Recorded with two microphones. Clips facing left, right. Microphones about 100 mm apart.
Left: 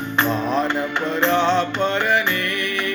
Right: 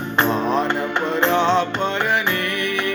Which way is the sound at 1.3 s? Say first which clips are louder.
Right 1 dB; 20° right (ahead or behind).